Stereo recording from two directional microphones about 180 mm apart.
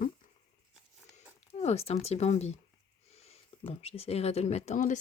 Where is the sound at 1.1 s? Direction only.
35° left (ahead or behind).